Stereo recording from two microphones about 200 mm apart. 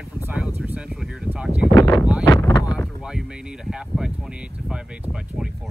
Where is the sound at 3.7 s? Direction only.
5° right (ahead or behind).